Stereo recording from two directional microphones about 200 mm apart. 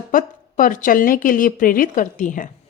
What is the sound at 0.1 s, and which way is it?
A woman's voice, 40° left (ahead or behind).